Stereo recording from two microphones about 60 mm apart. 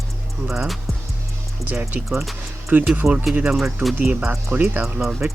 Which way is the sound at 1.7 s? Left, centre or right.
Right.